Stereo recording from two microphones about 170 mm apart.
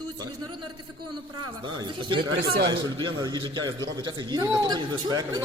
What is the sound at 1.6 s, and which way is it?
A man's voice, 25° right (ahead or behind).